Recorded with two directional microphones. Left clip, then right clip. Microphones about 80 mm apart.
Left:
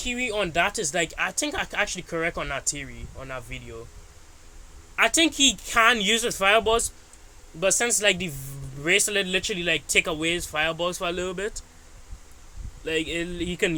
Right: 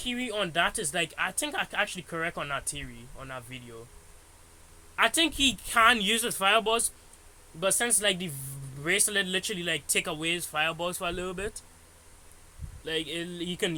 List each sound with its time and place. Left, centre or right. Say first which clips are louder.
0.0 s speech: left 5 dB; left
4.9 s speech: left 4 dB; left
12.8 s speech: left 5 dB; left